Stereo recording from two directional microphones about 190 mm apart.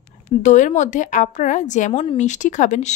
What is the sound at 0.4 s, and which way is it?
Speech, 40° left (ahead or behind).